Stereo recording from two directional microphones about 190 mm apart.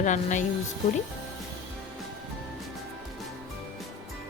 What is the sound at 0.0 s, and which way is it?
Speech, 40° left (ahead or behind).